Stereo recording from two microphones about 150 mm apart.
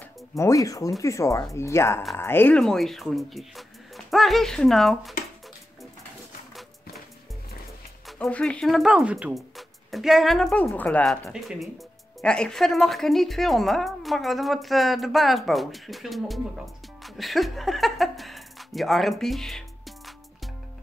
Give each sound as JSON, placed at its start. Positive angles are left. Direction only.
{"t": 0.4, "sound": "speech", "side_deg": 20}
{"t": 2.6, "sound": "a woman's voice", "side_deg": 0}
{"t": 8.2, "sound": "a woman's voice", "side_deg": 5}